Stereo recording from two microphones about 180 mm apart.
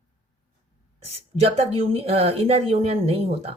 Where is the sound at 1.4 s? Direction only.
35° right (ahead or behind).